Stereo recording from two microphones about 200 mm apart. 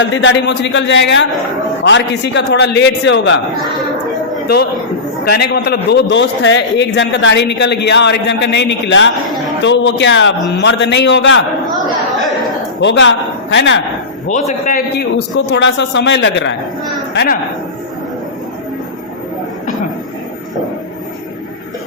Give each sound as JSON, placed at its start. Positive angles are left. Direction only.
{"t": 0.0, "sound": "a man's voice", "side_deg": 65}
{"t": 5.2, "sound": "a man's voice", "side_deg": 55}
{"t": 12.8, "sound": "a man's voice", "side_deg": 65}
{"t": 14.3, "sound": "a man's voice", "side_deg": 40}
{"t": 15.4, "sound": "a man's voice", "side_deg": 65}